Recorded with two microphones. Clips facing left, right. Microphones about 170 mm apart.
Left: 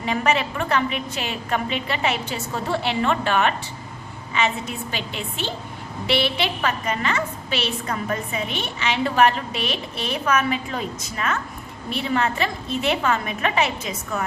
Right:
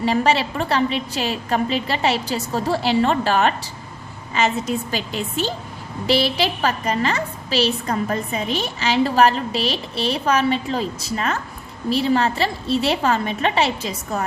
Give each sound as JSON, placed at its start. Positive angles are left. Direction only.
{"t": 0.0, "sound": "a woman's voice", "side_deg": -30}